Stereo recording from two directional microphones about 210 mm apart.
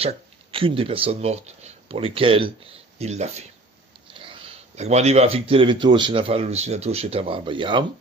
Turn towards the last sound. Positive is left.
turn(degrees=-25)  # may be behind; listen again after turning